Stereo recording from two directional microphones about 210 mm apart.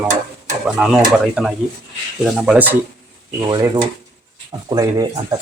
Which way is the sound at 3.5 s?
20° right (ahead or behind).